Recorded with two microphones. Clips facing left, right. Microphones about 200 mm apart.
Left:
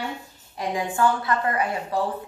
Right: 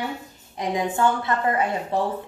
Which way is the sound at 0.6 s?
20° right (ahead or behind).